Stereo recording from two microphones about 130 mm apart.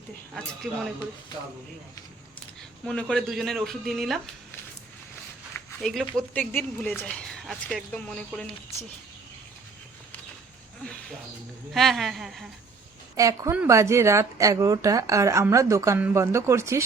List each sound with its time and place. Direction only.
2.8 s speech: 5° left (ahead or behind)
5.8 s speech: centre (ahead or behind)
6.3 s speech: 15° left (ahead or behind)
11.7 s speech: centre (ahead or behind)
13.1 s speech: 25° right (ahead or behind)